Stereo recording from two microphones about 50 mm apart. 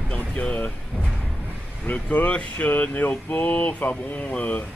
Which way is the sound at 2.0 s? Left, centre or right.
Left.